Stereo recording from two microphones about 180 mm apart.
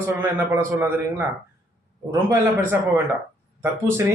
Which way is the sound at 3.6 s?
15° right (ahead or behind).